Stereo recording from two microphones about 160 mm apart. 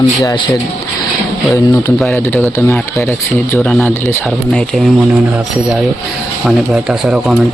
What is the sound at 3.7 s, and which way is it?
Speech, 5° left (ahead or behind).